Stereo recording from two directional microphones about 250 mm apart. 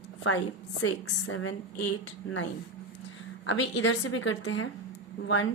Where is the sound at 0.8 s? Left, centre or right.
Left.